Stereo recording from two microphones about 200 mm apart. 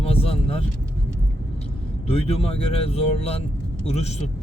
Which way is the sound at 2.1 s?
30° left (ahead or behind).